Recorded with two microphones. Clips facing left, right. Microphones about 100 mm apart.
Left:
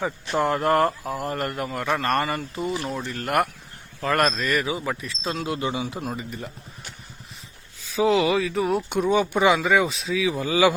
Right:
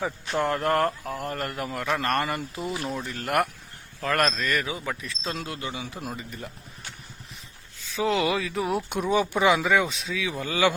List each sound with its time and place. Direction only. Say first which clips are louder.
0.0 s speech: left 3 dB; centre (ahead or behind)
5.5 s speech: left 7 dB; 20° left (ahead or behind)
6.0 s speech: left 4 dB; centre (ahead or behind)
7.9 s speech: left 5 dB; 5° left (ahead or behind)